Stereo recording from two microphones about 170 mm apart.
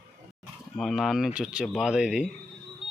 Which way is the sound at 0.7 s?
Centre (ahead or behind).